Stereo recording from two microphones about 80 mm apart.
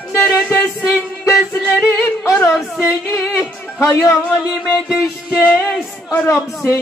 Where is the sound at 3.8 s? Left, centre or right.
Left.